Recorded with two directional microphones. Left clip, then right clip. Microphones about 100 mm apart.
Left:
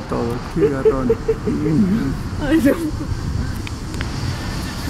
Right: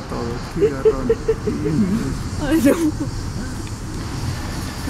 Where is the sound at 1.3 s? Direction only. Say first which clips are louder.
Left 1 dB; 20° right (ahead or behind).